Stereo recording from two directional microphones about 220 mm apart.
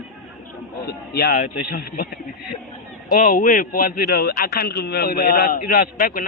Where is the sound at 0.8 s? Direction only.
45° left (ahead or behind).